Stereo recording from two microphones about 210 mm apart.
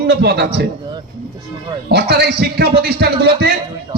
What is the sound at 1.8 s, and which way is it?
A man's voice, 50° right (ahead or behind).